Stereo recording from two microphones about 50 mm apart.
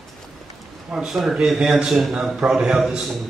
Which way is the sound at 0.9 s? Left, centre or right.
Centre.